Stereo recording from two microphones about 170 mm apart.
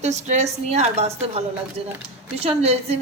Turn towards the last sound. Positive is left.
turn(degrees=-35)  # may be behind; listen again after turning